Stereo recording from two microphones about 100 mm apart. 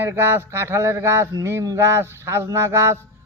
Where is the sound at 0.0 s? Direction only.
25° right (ahead or behind).